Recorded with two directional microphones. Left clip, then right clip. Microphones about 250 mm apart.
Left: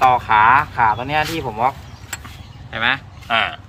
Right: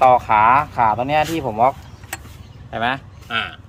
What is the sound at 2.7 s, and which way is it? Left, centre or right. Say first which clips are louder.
Speech: left 2 dB; right.